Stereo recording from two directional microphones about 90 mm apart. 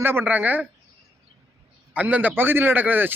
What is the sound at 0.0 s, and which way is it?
Speech, 25° right (ahead or behind).